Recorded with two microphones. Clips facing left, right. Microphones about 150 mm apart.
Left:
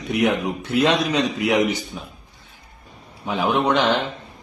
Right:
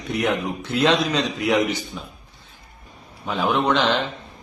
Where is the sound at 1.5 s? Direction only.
15° left (ahead or behind).